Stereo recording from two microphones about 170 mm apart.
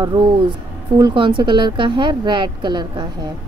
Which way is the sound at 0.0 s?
25° right (ahead or behind).